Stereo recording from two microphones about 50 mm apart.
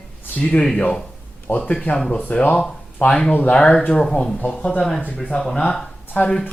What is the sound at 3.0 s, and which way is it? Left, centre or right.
A man's voice, left.